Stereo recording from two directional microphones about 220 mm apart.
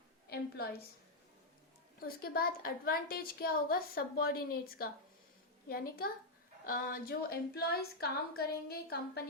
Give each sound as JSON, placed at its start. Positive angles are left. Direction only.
{"t": 0.3, "sound": "a woman's voice", "side_deg": 45}
{"t": 2.0, "sound": "a woman's voice", "side_deg": 45}